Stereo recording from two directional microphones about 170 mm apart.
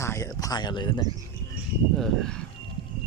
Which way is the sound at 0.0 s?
20° left (ahead or behind).